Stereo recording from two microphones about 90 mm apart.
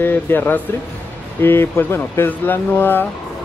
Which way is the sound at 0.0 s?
20° left (ahead or behind).